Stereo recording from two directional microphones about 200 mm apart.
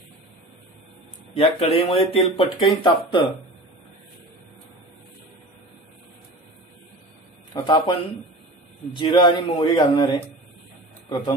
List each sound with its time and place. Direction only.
1.3 s a man's voice: 30° left (ahead or behind)
7.5 s a man's voice: 25° left (ahead or behind)
11.1 s speech: 20° left (ahead or behind)